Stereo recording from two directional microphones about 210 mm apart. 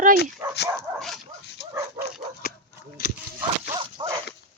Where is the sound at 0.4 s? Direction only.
15° right (ahead or behind).